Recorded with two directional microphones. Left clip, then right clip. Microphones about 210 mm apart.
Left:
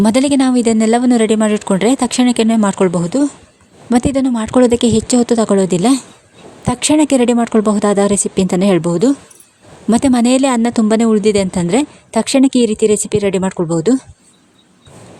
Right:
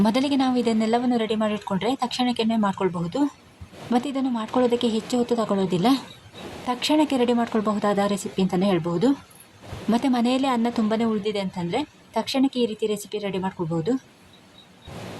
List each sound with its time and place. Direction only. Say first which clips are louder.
0.0 s a woman's voice: left 9 dB; 45° left (ahead or behind)